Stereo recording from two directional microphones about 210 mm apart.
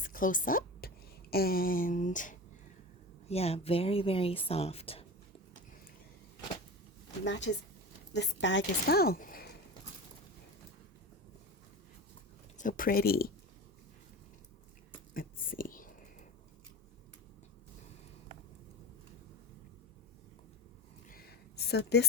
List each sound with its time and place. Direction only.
0.0 s a woman's voice: 40° left (ahead or behind)
7.3 s a woman's voice: 60° left (ahead or behind); by 9.5 s 40° left (ahead or behind)
12.5 s speech: 40° left (ahead or behind)
15.1 s whispering: 40° left (ahead or behind)
21.1 s a sound: 45° left (ahead or behind)